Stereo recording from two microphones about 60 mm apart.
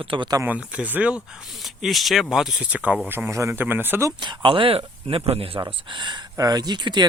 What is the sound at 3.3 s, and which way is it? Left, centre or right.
Speech, right.